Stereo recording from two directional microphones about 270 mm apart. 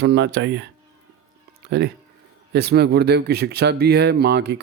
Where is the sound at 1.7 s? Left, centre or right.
Right.